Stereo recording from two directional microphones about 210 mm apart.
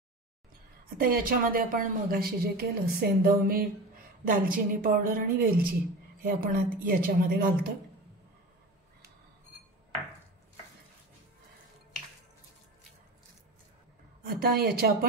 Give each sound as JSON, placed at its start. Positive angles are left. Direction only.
{"t": 0.9, "sound": "a woman's voice", "side_deg": -45}
{"t": 14.2, "sound": "a woman's voice", "side_deg": -45}